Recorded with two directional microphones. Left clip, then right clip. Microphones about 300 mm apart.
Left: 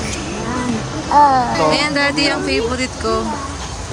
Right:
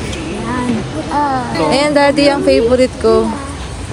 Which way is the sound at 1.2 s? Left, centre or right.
Left.